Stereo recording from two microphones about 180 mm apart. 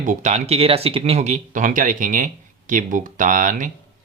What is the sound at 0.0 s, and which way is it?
Speech, 45° right (ahead or behind).